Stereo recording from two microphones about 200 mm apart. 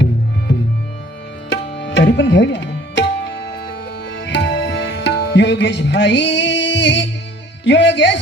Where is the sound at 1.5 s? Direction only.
60° left (ahead or behind).